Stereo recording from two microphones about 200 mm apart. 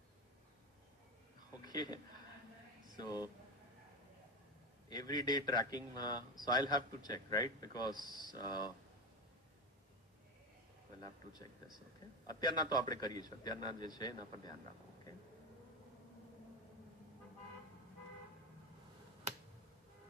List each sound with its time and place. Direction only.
1.6 s a man's voice: 20° left (ahead or behind)
3.0 s a man's voice: 20° left (ahead or behind)
4.9 s a man's voice: 20° left (ahead or behind)
11.0 s a man's voice: 20° left (ahead or behind)